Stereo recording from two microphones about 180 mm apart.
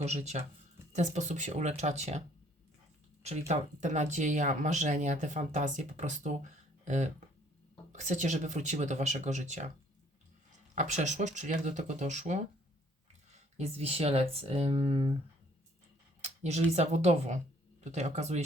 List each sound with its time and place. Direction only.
0.0 s speech: 35° right (ahead or behind)
3.2 s speech: 40° right (ahead or behind)
10.8 s speech: 40° right (ahead or behind)
16.2 s speech: 40° right (ahead or behind)